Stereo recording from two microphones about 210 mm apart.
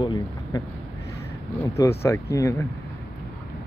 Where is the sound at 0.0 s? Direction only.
20° left (ahead or behind).